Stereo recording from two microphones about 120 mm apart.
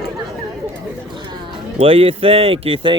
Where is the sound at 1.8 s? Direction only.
50° right (ahead or behind).